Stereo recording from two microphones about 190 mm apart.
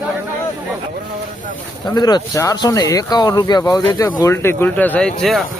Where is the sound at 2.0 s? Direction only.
20° left (ahead or behind).